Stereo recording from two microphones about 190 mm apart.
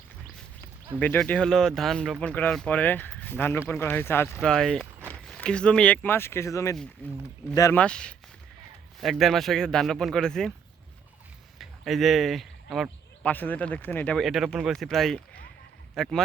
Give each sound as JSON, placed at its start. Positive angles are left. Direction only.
{"t": 0.9, "sound": "speech", "side_deg": 10}
{"t": 7.8, "sound": "speech", "side_deg": 5}
{"t": 11.5, "sound": "speech", "side_deg": 0}